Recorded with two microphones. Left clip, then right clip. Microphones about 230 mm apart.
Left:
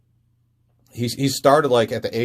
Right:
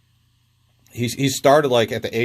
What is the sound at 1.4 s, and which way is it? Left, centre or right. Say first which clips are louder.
Speech: even; right.